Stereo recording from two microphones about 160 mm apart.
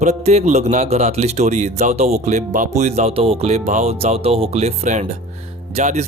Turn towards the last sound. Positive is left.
turn(degrees=-45)  # may be behind; listen again after turning